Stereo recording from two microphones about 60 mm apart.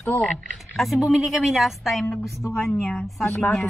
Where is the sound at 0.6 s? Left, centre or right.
Centre.